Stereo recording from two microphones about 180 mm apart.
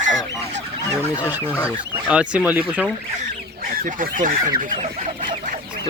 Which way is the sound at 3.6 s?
50° right (ahead or behind).